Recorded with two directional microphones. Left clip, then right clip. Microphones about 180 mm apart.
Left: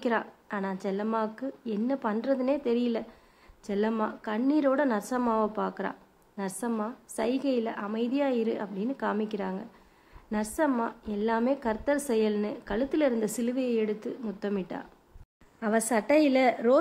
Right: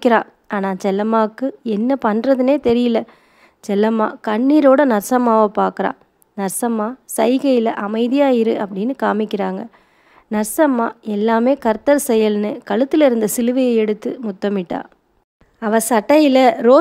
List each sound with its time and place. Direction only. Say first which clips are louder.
0.0 s a woman's voice: right 15 dB; 45° right (ahead or behind)